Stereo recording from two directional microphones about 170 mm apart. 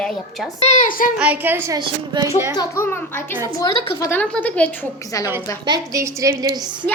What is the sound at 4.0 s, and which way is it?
A woman's voice, 10° left (ahead or behind).